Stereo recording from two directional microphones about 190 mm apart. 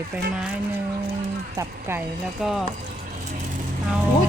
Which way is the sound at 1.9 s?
5° right (ahead or behind).